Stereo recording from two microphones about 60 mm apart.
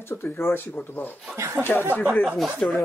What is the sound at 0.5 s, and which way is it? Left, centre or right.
Speech, left.